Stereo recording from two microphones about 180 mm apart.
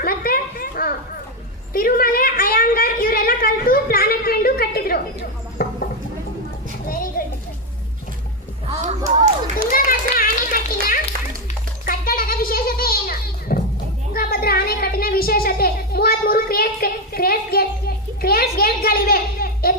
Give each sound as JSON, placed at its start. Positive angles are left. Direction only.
{"t": 0.0, "sound": "children playing", "side_deg": 55}
{"t": 1.7, "sound": "a sound", "side_deg": 50}
{"t": 5.6, "sound": "rodents", "side_deg": 60}
{"t": 6.8, "sound": "children playing", "side_deg": 50}
{"t": 8.7, "sound": "speech", "side_deg": -40}
{"t": 9.6, "sound": "children playing", "side_deg": 50}
{"t": 11.9, "sound": "a sound", "side_deg": 50}